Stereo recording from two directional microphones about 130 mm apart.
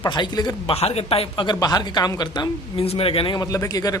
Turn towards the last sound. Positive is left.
turn(degrees=30)  # may be behind; listen again after turning